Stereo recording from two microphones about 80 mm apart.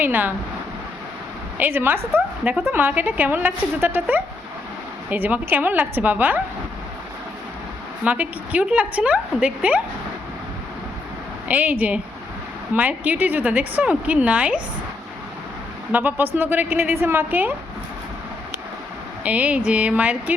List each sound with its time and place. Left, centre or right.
0.0 s a woman's voice: right
1.5 s a woman's voice: right
5.0 s a woman's voice: right
8.0 s a woman's voice: centre
11.4 s a woman's voice: centre
12.7 s a woman's voice: centre
15.9 s a woman's voice: right
19.2 s a woman's voice: centre